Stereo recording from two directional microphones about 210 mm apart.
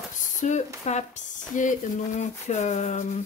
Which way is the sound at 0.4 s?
35° left (ahead or behind).